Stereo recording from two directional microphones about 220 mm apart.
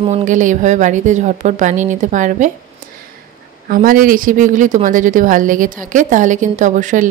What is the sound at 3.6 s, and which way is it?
A woman's voice, 40° right (ahead or behind).